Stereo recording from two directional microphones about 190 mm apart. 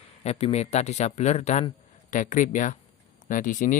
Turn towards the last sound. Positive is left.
turn(degrees=45)  # may be behind; listen again after turning